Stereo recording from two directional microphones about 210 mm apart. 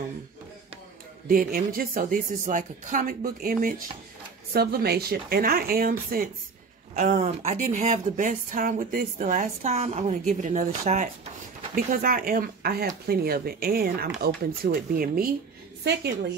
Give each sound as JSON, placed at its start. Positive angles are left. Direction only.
{"t": 1.2, "sound": "a woman's voice", "side_deg": -45}